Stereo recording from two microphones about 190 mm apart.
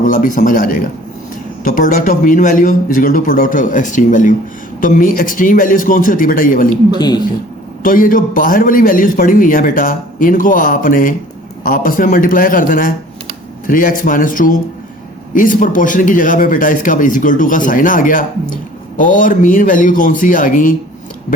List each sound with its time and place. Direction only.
0.0 s speech: 45° left (ahead or behind)
7.0 s speech: 20° left (ahead or behind)
7.8 s speech: 45° left (ahead or behind)